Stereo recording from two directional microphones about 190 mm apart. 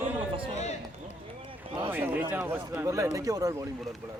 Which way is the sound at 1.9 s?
10° right (ahead or behind).